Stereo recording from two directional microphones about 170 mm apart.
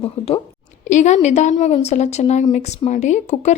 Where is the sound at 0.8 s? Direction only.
45° left (ahead or behind).